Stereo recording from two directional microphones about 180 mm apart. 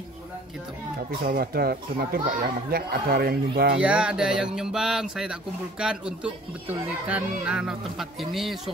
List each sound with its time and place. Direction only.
1.2 s speech: 55° right (ahead or behind)
3.8 s music: 5° right (ahead or behind)